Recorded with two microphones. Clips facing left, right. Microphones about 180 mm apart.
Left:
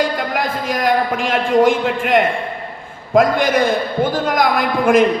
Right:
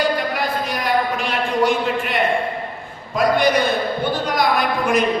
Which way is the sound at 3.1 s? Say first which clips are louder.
Left 3 dB; 90° left.